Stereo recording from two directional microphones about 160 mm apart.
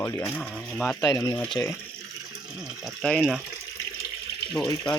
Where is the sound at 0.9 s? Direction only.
25° left (ahead or behind).